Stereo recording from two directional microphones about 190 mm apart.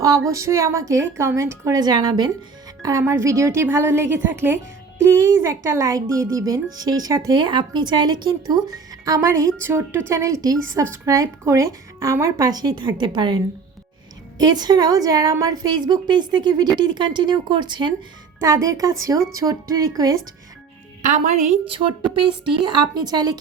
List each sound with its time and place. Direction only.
0.3 s a woman's voice: 15° right (ahead or behind)
21.0 s a woman's voice: 40° right (ahead or behind)
21.7 s a woman's voice: 25° right (ahead or behind)